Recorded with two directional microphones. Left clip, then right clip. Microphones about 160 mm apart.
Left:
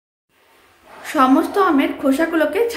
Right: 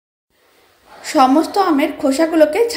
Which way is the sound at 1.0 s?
15° right (ahead or behind).